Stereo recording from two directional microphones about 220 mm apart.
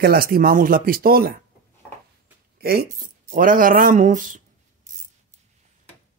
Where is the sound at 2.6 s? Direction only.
45° right (ahead or behind).